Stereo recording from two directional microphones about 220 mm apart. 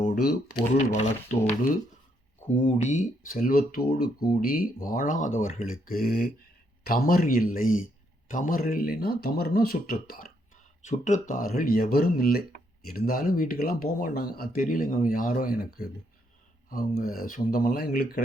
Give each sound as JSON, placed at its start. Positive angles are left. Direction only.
{"t": 0.0, "sound": "typing", "side_deg": 40}
{"t": 0.9, "sound": "speech", "side_deg": 35}